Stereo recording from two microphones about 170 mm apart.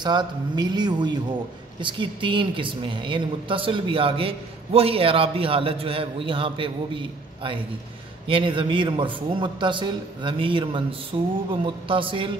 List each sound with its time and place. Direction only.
0.0 s a man's voice: 25° right (ahead or behind)